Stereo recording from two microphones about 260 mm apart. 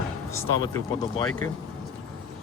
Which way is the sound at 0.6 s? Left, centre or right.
Centre.